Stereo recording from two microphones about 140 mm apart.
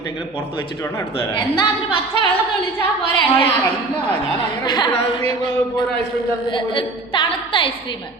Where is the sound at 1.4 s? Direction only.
35° left (ahead or behind).